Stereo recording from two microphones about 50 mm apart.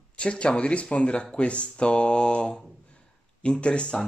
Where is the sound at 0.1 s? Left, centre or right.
Left.